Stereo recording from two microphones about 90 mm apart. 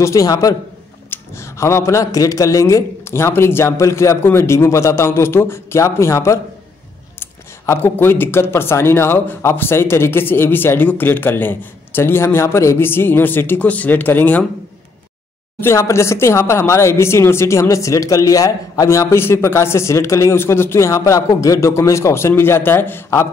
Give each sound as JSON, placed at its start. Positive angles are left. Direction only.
{"t": 0.0, "sound": "speech", "side_deg": 40}
{"t": 15.6, "sound": "speech", "side_deg": 30}